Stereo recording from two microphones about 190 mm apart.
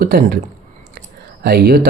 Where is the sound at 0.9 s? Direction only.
55° right (ahead or behind).